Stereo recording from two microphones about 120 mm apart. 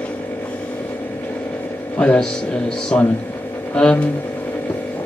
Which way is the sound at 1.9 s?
10° left (ahead or behind).